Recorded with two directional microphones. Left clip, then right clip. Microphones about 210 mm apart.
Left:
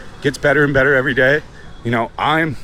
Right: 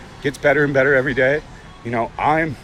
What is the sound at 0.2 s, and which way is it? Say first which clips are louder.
Speech: left 2 dB; 20° left (ahead or behind).